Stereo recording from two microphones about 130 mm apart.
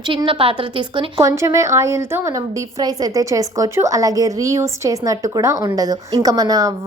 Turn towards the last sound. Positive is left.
turn(degrees=-25)  # may be behind; listen again after turning